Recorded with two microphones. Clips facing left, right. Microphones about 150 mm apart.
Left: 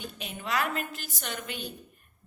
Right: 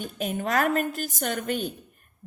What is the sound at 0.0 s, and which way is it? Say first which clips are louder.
A woman's voice: right 9 dB; 45° right (ahead or behind).